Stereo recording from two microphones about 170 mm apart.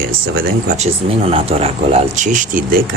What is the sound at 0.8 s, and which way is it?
Speech, 35° right (ahead or behind).